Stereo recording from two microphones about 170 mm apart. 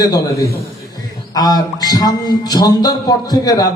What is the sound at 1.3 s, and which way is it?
A man's voice, 25° left (ahead or behind).